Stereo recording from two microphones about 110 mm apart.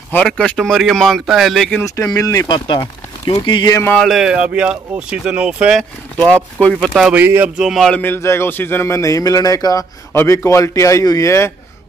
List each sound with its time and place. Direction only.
0.1 s speech: 10° left (ahead or behind)
2.0 s speech: 30° left (ahead or behind)
4.0 s speech: 5° right (ahead or behind)
6.6 s speech: 5° left (ahead or behind)
7.1 s speech: 20° right (ahead or behind)
7.4 s speech: 5° right (ahead or behind)
7.9 s a man's voice: 20° left (ahead or behind)